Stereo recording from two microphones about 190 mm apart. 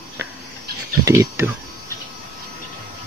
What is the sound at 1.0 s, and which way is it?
Speech, 15° right (ahead or behind).